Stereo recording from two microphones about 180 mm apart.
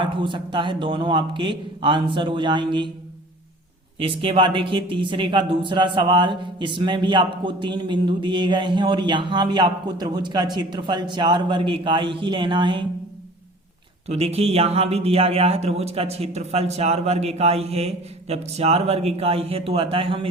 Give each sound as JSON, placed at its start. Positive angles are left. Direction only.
{"t": 0.0, "sound": "speech", "side_deg": -25}
{"t": 3.9, "sound": "speech", "side_deg": -30}
{"t": 14.1, "sound": "speech", "side_deg": -35}